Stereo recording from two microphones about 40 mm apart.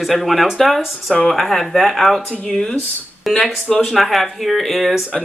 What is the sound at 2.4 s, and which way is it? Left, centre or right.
Speech, centre.